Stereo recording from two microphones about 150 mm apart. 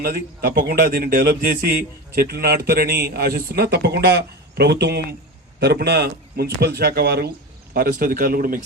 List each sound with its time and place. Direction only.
0.0 s a man's voice: 90° right
7.7 s speech: 75° right (ahead or behind)